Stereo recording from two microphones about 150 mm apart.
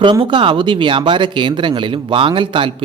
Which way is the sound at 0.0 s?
35° right (ahead or behind).